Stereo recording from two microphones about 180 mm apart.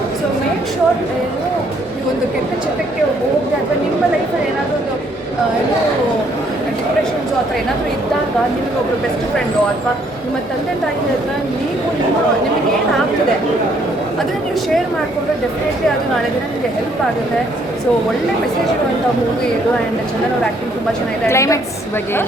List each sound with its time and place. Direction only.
21.2 s a woman's voice: 15° left (ahead or behind)